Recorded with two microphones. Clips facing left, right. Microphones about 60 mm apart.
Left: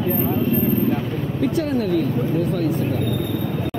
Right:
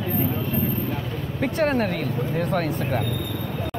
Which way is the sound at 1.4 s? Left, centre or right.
Right.